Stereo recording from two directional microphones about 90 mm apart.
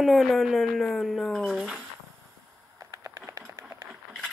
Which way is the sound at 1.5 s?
5° right (ahead or behind).